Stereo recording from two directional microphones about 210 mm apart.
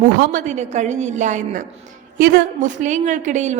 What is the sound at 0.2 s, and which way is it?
A woman's voice, 35° right (ahead or behind).